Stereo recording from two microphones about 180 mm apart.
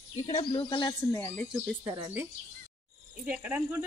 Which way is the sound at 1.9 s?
10° right (ahead or behind).